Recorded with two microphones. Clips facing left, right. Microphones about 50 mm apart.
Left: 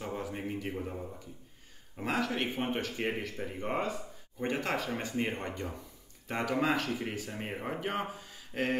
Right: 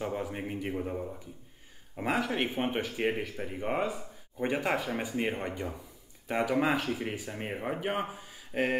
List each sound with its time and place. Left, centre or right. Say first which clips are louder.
0.0 s speech: right 3 dB; centre